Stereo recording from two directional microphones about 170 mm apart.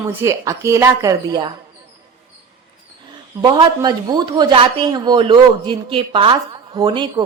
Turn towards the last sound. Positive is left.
turn(degrees=-30)  # may be behind; listen again after turning